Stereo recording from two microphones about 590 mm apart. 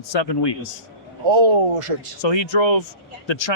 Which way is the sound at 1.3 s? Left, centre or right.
Right.